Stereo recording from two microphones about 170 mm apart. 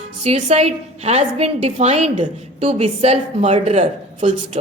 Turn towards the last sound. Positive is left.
turn(degrees=-45)  # may be behind; listen again after turning